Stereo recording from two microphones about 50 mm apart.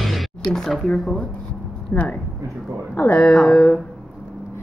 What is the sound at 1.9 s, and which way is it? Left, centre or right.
Speech, left.